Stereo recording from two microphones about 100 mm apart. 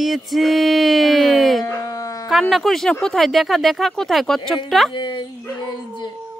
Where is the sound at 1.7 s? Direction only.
30° left (ahead or behind).